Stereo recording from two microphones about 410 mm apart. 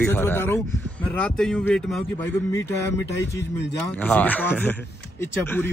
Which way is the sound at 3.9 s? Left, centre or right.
Centre.